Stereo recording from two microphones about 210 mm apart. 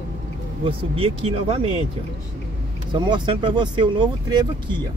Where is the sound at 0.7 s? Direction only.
25° right (ahead or behind).